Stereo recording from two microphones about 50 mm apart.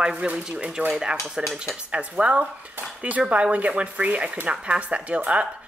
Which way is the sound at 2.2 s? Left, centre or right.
Right.